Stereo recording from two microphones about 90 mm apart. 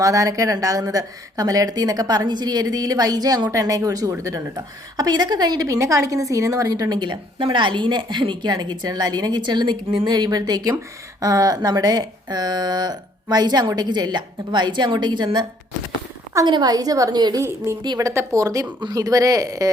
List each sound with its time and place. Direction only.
0.0 s a woman's voice: 40° right (ahead or behind)
7.0 s a woman's voice: 65° right (ahead or behind)
16.5 s a woman's voice: 50° right (ahead or behind)